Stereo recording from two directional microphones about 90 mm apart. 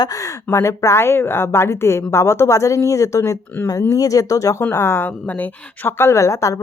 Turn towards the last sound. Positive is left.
turn(degrees=35)  # may be behind; listen again after turning